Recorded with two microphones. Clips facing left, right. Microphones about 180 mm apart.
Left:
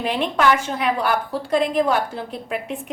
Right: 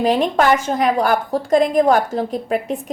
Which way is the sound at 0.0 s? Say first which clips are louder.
Right 4 dB; 40° right (ahead or behind).